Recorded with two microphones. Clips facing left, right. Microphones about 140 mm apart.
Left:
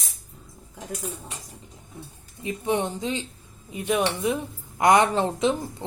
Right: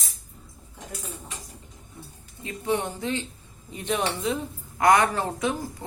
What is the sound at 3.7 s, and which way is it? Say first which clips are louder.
Speech: left 3 dB; 5° left (ahead or behind).